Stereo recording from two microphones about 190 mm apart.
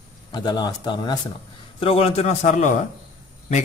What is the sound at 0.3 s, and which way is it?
A man's voice, 25° left (ahead or behind).